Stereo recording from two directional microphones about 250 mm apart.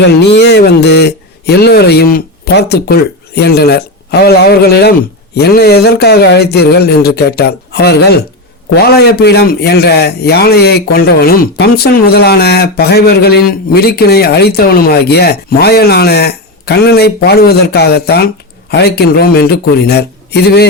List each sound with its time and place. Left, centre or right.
0.0 s speech: left